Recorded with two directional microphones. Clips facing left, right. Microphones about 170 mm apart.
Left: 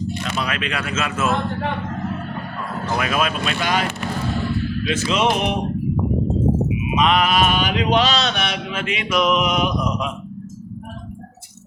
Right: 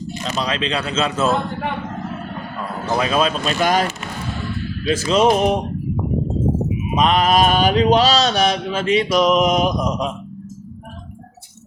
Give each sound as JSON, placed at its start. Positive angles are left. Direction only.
{"t": 0.2, "sound": "mantra", "side_deg": -25}
{"t": 2.9, "sound": "mantra", "side_deg": -30}
{"t": 4.9, "sound": "mantra", "side_deg": -35}
{"t": 6.8, "sound": "mantra", "side_deg": -40}